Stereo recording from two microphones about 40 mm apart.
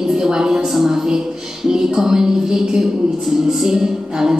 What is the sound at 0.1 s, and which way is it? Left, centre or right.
Music, centre.